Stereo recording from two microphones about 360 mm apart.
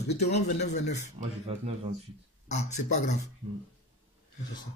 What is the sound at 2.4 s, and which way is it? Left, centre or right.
Speech, centre.